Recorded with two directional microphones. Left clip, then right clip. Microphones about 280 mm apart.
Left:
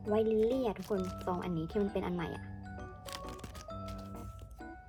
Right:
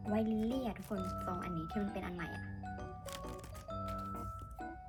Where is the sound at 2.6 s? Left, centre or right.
Centre.